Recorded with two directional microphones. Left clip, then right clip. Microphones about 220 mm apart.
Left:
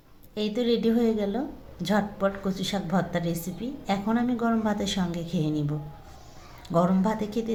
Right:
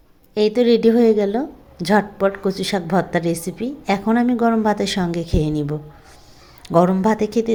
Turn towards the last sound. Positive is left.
turn(degrees=-40)  # may be behind; listen again after turning